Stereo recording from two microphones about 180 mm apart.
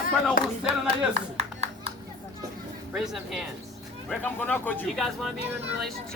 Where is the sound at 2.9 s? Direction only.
Centre (ahead or behind).